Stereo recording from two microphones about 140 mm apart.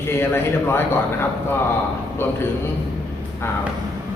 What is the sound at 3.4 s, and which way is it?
Speech, 20° left (ahead or behind).